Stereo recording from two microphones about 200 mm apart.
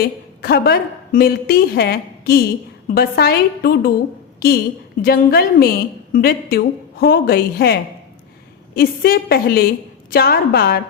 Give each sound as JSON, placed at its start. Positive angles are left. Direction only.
{"t": 0.0, "sound": "a woman's voice", "side_deg": 50}
{"t": 5.0, "sound": "a woman's voice", "side_deg": 50}